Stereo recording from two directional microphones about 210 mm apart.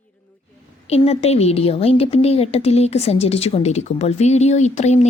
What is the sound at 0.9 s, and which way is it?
A woman's voice, 30° left (ahead or behind).